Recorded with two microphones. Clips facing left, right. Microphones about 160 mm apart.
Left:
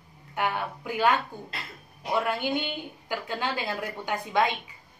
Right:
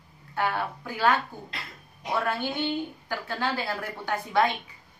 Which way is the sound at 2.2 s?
15° left (ahead or behind).